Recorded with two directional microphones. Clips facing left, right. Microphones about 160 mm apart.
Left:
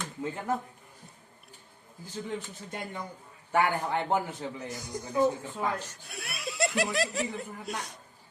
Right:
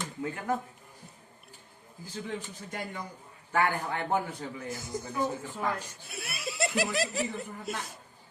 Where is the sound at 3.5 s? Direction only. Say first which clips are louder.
Left 2 dB; 20° left (ahead or behind).